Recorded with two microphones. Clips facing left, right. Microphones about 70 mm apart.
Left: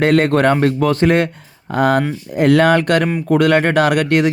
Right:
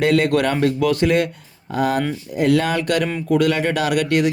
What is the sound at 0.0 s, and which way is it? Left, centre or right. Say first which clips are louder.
Speech: left 4 dB; left.